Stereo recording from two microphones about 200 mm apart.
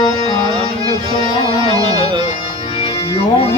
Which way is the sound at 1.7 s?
25° right (ahead or behind).